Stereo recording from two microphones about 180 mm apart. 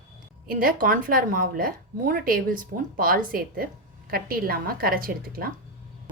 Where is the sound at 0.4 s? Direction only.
55° right (ahead or behind).